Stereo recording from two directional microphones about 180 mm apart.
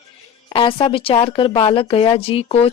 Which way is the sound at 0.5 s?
30° left (ahead or behind).